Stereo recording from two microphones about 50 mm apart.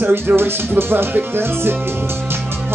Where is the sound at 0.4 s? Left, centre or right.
Right.